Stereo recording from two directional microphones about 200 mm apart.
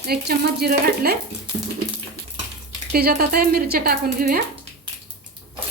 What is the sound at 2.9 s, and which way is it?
Speech, 50° right (ahead or behind).